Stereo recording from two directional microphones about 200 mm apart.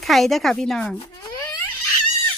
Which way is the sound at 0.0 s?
Centre (ahead or behind).